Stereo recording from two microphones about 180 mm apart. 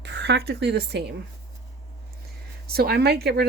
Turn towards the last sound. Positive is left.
turn(degrees=-60)  # may be behind; listen again after turning